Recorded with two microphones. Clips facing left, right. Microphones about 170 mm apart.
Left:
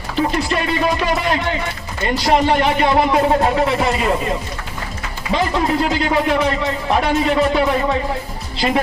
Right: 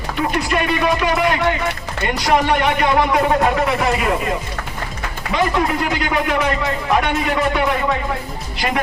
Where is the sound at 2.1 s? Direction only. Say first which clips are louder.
Left 2 dB; 30° left (ahead or behind).